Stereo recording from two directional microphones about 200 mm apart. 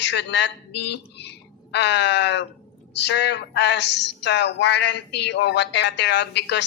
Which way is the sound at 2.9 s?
60° left (ahead or behind).